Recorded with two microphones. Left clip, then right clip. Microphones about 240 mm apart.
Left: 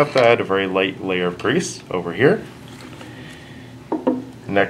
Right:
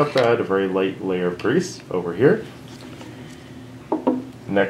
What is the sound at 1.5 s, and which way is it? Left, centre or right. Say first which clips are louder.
Speech: left 1 dB; left.